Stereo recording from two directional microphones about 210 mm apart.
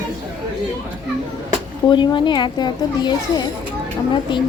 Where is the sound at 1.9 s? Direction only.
20° left (ahead or behind).